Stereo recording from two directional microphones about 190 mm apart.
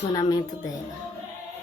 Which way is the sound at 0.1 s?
20° left (ahead or behind).